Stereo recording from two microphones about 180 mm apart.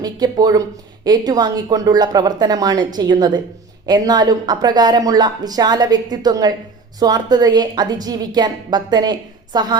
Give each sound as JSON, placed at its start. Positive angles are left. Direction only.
{"t": 0.0, "sound": "a woman's voice", "side_deg": -20}